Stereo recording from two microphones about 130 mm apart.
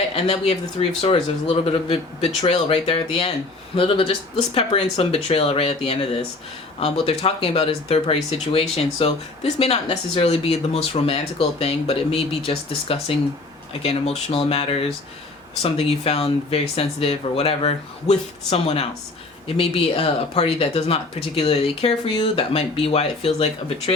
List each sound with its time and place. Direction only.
0.2 s speech: 55° left (ahead or behind)